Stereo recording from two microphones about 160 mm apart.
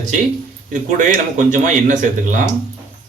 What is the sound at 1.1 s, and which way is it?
Speech, 55° right (ahead or behind).